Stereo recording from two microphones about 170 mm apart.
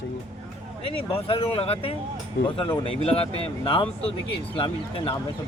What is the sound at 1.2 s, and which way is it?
Speech, 35° left (ahead or behind).